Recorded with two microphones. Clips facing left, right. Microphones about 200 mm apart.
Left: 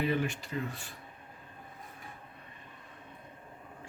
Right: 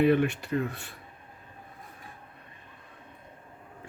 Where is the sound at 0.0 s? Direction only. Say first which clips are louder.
Right 8 dB; 60° right (ahead or behind).